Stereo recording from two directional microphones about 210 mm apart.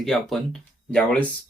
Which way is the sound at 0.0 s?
Centre (ahead or behind).